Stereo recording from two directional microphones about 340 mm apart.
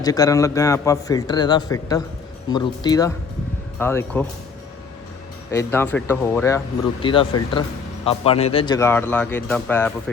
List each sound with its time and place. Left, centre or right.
0.0 s a man's voice: centre
5.5 s a man's voice: centre